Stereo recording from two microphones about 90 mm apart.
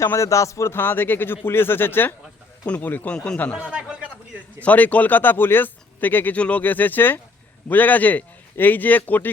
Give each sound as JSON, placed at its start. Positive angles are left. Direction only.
{"t": 0.0, "sound": "speech", "side_deg": 35}
{"t": 3.6, "sound": "speech", "side_deg": -10}
{"t": 4.6, "sound": "speech", "side_deg": 15}